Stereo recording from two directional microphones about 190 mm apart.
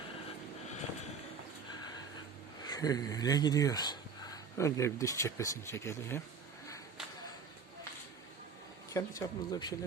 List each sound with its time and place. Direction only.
2.6 s speech: 20° left (ahead or behind)
8.9 s speech: 15° left (ahead or behind)